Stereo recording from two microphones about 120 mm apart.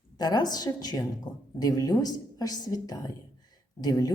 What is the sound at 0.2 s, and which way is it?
A woman's voice, 35° left (ahead or behind).